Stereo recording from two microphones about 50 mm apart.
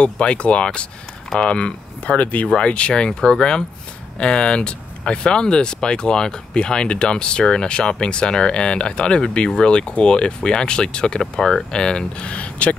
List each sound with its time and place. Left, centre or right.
0.0 s speech: left